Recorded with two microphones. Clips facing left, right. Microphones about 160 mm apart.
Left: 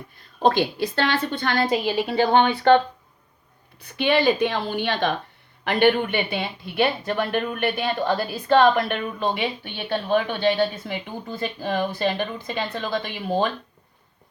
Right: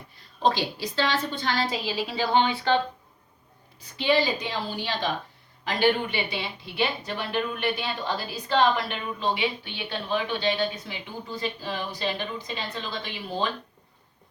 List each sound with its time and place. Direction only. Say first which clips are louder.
0.4 s a woman's voice: left 5 dB; 55° left (ahead or behind)